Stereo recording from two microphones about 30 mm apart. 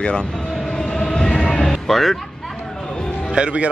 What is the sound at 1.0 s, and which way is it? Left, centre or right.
Train, left.